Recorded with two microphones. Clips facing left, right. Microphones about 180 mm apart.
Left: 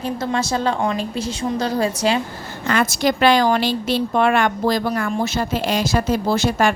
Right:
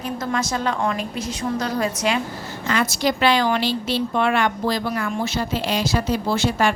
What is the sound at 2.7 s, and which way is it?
A woman's voice, 50° left (ahead or behind).